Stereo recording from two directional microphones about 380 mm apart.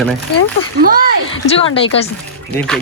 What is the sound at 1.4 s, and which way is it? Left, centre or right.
Speech, centre.